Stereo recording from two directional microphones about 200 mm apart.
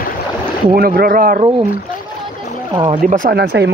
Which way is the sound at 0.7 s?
50° right (ahead or behind).